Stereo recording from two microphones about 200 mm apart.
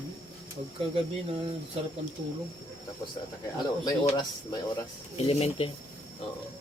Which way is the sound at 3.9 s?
20° left (ahead or behind).